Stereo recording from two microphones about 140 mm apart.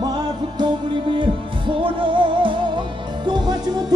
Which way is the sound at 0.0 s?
30° right (ahead or behind).